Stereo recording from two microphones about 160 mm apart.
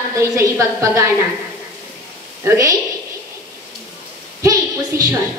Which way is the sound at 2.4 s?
20° right (ahead or behind).